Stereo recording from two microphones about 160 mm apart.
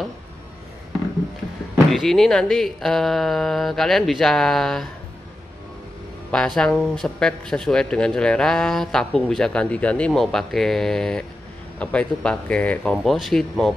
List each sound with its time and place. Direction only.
1.9 s speech: centre (ahead or behind)
6.3 s speech: 5° left (ahead or behind)